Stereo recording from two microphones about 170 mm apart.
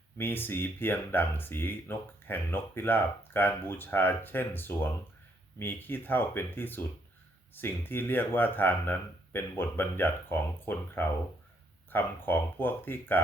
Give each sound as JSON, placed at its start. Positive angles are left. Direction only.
{"t": 0.2, "sound": "speech", "side_deg": 10}